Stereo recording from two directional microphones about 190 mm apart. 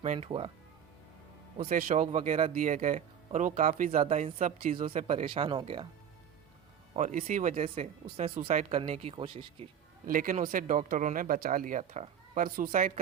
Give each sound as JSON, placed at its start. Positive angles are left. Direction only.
{"t": 0.0, "sound": "speech", "side_deg": -35}
{"t": 1.5, "sound": "speech", "side_deg": -40}
{"t": 2.6, "sound": "speech", "side_deg": -40}
{"t": 4.7, "sound": "speech", "side_deg": -30}
{"t": 6.9, "sound": "speech", "side_deg": -40}
{"t": 8.1, "sound": "speech", "side_deg": -30}
{"t": 10.1, "sound": "speech", "side_deg": -45}